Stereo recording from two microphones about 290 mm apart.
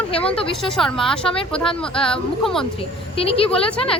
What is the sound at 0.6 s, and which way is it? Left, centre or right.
Speech, centre.